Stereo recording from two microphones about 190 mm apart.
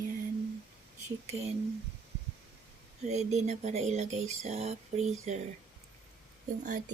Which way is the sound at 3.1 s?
35° right (ahead or behind).